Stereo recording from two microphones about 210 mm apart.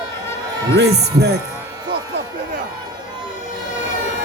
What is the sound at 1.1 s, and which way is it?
Speech, 50° right (ahead or behind).